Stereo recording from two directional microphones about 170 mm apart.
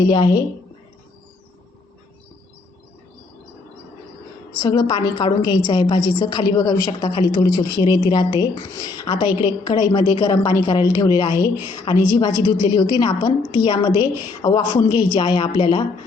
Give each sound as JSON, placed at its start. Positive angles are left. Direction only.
{"t": 0.1, "sound": "a woman's voice", "side_deg": 25}
{"t": 4.6, "sound": "a woman's voice", "side_deg": 25}